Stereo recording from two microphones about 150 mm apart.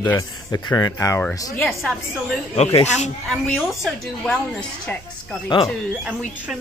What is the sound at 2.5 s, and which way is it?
Speech, 50° left (ahead or behind).